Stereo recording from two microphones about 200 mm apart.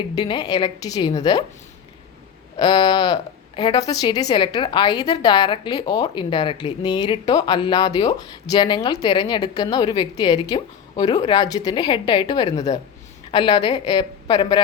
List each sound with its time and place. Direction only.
0.2 s a woman's voice: 20° left (ahead or behind)
2.6 s a woman's voice: 25° left (ahead or behind)